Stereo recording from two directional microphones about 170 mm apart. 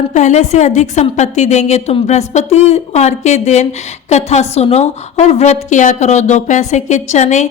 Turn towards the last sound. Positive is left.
turn(degrees=45)  # may be behind; listen again after turning